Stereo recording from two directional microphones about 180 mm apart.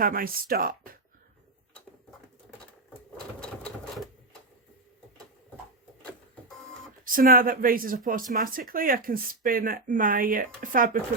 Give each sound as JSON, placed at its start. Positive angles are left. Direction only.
{"t": 0.0, "sound": "speech", "side_deg": -50}
{"t": 3.4, "sound": "sewing machine", "side_deg": 0}
{"t": 7.0, "sound": "speech", "side_deg": -50}